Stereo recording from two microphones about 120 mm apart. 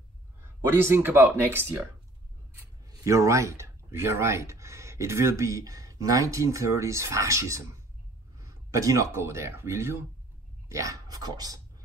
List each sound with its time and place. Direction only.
0.4 s speech: 20° right (ahead or behind)
2.9 s speech: 25° right (ahead or behind)